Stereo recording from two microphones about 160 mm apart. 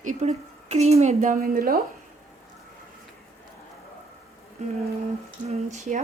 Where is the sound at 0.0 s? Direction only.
50° right (ahead or behind); by 1.8 s 65° right (ahead or behind).